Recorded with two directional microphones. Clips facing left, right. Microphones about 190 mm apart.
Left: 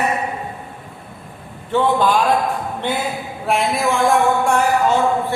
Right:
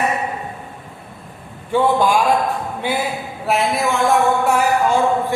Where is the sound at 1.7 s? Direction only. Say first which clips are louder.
Right 1 dB; 10° right (ahead or behind).